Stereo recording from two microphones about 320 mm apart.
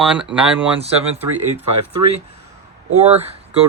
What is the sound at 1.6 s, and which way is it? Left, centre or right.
Speech, right.